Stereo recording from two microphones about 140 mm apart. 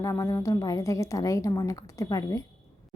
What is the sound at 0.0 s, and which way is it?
A woman's voice, 25° left (ahead or behind).